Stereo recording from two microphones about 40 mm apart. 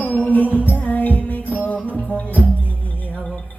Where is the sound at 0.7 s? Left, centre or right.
Left.